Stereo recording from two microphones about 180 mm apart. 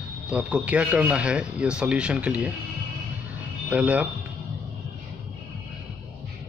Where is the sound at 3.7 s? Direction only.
10° right (ahead or behind).